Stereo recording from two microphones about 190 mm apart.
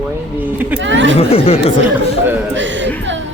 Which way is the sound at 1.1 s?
30° left (ahead or behind).